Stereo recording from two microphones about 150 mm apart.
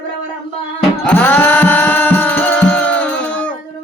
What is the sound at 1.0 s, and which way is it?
Music, 10° left (ahead or behind).